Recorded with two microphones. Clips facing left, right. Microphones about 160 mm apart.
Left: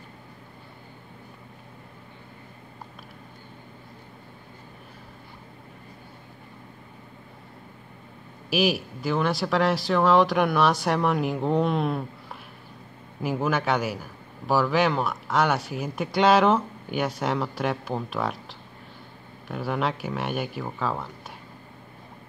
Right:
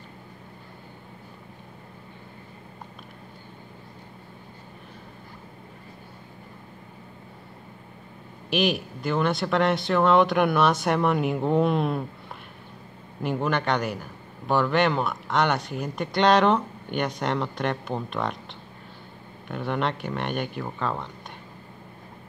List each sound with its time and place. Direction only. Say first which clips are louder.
8.5 s a man's voice: left 1 dB; 5° left (ahead or behind)
13.2 s a man's voice: even; 5° left (ahead or behind)